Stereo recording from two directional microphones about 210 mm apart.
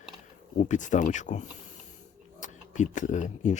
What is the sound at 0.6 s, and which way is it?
Speech, 35° left (ahead or behind).